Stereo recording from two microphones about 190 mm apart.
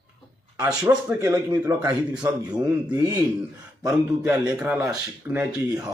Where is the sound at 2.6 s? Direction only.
20° right (ahead or behind).